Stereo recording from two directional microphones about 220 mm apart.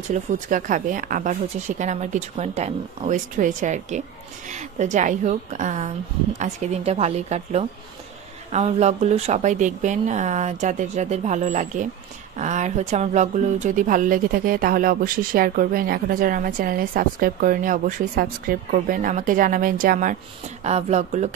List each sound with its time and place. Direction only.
0.1 s speech: 35° right (ahead or behind)